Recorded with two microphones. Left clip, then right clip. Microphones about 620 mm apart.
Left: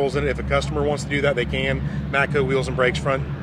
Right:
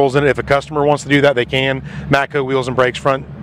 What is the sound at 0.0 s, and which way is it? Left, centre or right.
Speech, right.